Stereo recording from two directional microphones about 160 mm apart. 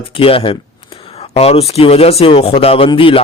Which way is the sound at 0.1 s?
35° left (ahead or behind).